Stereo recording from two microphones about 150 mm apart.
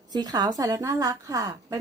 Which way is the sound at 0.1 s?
25° right (ahead or behind).